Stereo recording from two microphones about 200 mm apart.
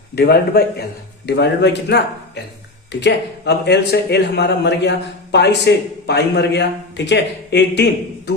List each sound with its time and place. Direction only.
0.2 s a man's voice: 55° left (ahead or behind)